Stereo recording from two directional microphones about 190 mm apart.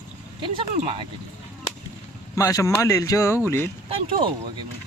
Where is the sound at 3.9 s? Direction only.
25° right (ahead or behind).